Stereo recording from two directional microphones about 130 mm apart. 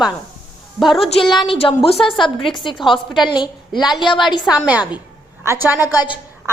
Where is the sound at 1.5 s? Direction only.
45° left (ahead or behind).